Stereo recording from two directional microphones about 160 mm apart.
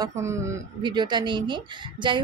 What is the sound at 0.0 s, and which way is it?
Speech, 20° right (ahead or behind).